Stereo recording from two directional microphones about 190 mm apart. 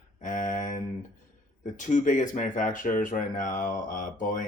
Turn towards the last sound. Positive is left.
turn(degrees=40)  # may be behind; listen again after turning